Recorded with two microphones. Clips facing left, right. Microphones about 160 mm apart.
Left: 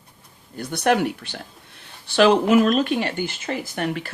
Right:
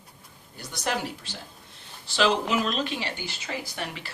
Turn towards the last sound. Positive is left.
turn(degrees=55)  # may be behind; listen again after turning